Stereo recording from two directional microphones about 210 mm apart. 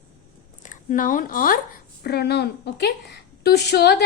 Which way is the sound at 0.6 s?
35° left (ahead or behind).